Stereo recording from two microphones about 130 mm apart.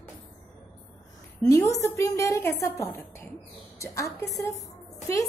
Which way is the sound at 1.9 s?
25° left (ahead or behind).